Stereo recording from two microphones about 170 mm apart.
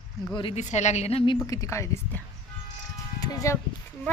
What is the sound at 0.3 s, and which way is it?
Speech, 30° left (ahead or behind).